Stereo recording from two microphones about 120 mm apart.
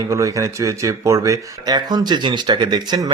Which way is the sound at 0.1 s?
25° right (ahead or behind).